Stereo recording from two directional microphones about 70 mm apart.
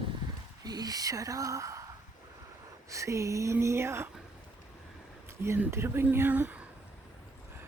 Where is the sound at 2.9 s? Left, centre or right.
Right.